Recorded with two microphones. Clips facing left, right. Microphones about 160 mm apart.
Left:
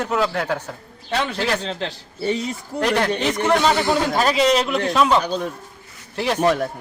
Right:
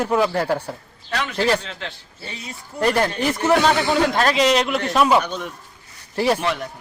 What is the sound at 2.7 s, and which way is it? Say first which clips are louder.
Speech: right 1 dB; 10° right (ahead or behind).